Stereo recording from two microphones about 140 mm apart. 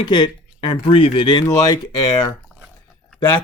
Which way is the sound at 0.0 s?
35° left (ahead or behind).